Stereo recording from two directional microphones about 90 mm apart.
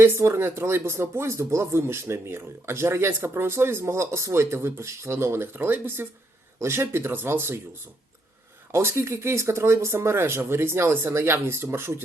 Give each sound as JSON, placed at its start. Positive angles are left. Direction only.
{"t": 0.0, "sound": "speech", "side_deg": -30}
{"t": 8.7, "sound": "speech", "side_deg": -30}